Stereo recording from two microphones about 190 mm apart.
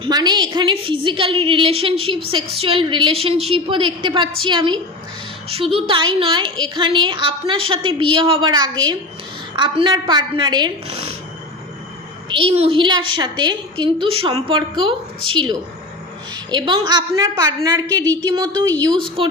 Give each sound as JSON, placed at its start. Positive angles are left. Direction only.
{"t": 0.0, "sound": "a woman's voice", "side_deg": -20}
{"t": 12.3, "sound": "a woman's voice", "side_deg": -30}